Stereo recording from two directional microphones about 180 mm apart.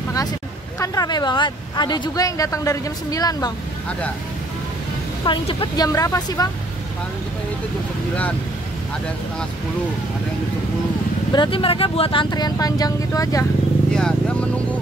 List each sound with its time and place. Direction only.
0.7 s speech: 20° left (ahead or behind)
5.2 s speech: 30° left (ahead or behind)
11.3 s speech: 30° left (ahead or behind)
13.9 s a sound: 5° left (ahead or behind)